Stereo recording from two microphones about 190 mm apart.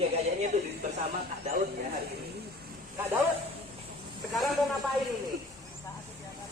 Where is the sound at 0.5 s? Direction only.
35° right (ahead or behind).